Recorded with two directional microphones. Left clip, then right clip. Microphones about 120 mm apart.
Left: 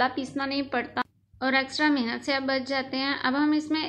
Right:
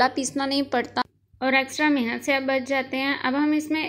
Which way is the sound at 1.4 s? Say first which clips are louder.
Right 3 dB; 20° right (ahead or behind).